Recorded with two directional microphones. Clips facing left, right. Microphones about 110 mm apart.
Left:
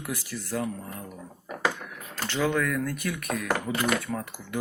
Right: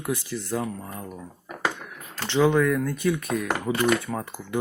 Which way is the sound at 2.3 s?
20° right (ahead or behind).